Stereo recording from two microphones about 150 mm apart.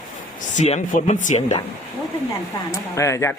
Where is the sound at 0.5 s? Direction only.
50° left (ahead or behind).